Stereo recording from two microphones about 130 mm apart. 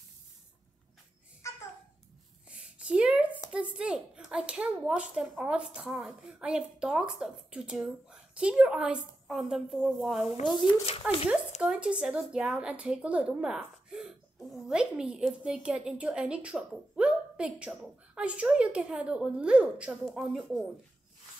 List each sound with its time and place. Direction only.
1.4 s babbling: 20° left (ahead or behind)
2.5 s a sound: 10° right (ahead or behind)
3.5 s a woman's voice: 10° right (ahead or behind)
10.4 s speech: 40° left (ahead or behind)
11.6 s a woman's voice: 5° right (ahead or behind)